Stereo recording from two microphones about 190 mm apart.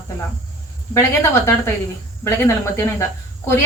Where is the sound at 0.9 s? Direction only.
15° left (ahead or behind).